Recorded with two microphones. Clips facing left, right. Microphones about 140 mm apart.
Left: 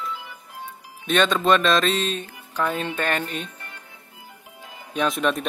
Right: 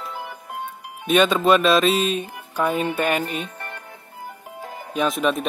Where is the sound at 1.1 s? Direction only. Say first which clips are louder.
Right 3 dB; 10° right (ahead or behind).